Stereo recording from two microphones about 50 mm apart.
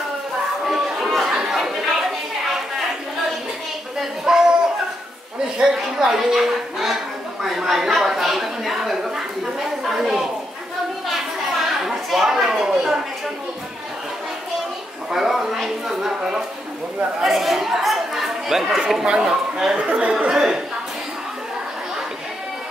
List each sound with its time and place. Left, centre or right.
0.7 s chatter: centre
4.2 s a sound: centre
5.8 s a woman's voice: centre
11.8 s speech: centre
15.0 s a woman's voice: centre
19.9 s a woman's voice: right